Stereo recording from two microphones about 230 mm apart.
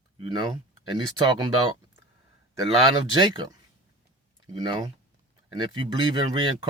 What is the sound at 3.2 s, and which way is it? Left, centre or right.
Speech, centre.